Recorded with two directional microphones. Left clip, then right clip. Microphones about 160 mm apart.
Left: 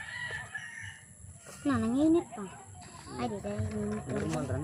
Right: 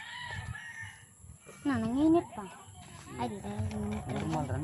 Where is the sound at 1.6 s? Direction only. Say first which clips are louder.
Left 2 dB; 10° right (ahead or behind).